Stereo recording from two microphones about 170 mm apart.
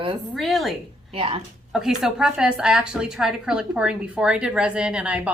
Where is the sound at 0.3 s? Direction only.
Centre (ahead or behind).